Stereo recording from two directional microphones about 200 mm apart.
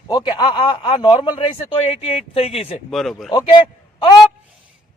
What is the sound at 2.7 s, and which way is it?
Speech, centre (ahead or behind).